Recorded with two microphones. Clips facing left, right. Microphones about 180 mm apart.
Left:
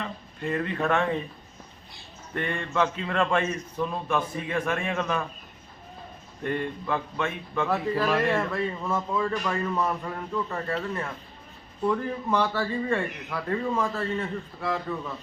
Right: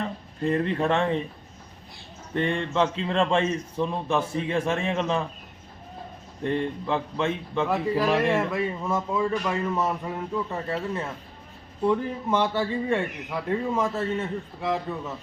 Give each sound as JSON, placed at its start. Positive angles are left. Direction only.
{"t": 0.0, "sound": "speech", "side_deg": -35}
{"t": 2.3, "sound": "a man's voice", "side_deg": -25}
{"t": 6.4, "sound": "a man's voice", "side_deg": -25}
{"t": 7.7, "sound": "a man's voice", "side_deg": -10}
{"t": 11.9, "sound": "a man's voice", "side_deg": -20}